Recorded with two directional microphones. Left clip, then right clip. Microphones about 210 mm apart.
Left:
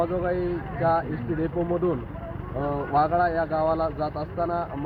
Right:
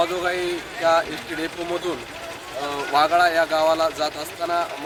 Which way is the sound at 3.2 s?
30° right (ahead or behind).